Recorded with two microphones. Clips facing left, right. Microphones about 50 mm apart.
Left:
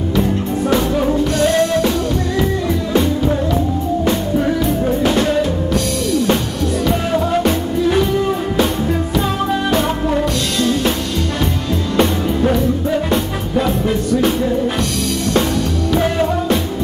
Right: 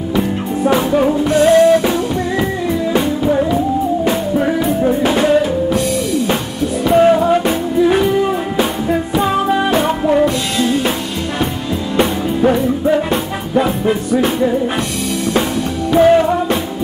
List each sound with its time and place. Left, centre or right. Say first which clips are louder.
0.7 s music: right 4 dB; centre
4.0 s music: right 1 dB; centre
7.0 s music: right 6 dB; centre
9.2 s music: right 4 dB; centre
12.0 s music: right 2 dB; centre
15.9 s music: right 8 dB; centre